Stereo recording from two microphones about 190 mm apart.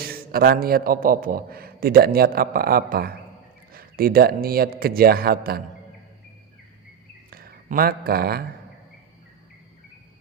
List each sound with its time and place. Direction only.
0.0 s a man's voice: 50° right (ahead or behind)
7.3 s speech: 50° right (ahead or behind)